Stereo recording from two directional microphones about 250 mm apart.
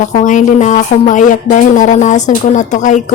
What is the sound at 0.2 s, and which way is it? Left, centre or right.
A woman's voice, left.